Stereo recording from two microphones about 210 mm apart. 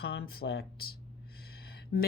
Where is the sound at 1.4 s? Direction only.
50° left (ahead or behind).